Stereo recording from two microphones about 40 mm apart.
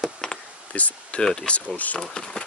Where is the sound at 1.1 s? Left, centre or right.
Left.